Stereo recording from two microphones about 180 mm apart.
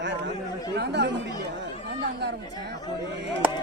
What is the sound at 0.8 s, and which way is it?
Speech, 75° right (ahead or behind).